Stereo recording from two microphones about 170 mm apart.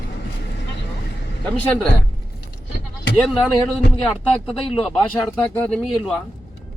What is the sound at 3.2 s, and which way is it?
Speech, 10° left (ahead or behind).